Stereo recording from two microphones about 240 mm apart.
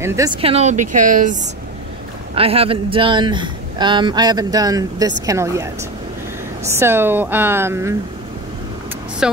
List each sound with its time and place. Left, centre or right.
0.0 s a woman's voice: centre
9.2 s speech: centre